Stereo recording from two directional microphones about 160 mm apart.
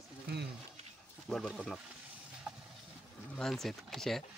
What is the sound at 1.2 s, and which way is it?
Speech, centre (ahead or behind).